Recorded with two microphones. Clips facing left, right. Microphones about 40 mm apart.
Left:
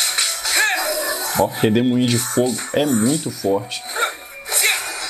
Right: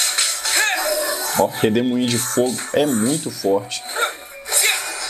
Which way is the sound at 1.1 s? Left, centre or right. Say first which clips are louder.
Right 1 dB; left.